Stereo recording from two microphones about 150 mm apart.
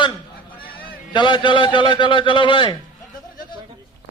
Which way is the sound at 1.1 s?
30° left (ahead or behind).